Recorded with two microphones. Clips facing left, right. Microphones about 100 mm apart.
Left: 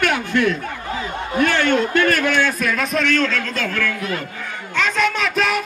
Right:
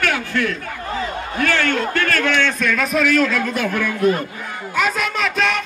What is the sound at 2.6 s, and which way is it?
A man's voice, centre (ahead or behind).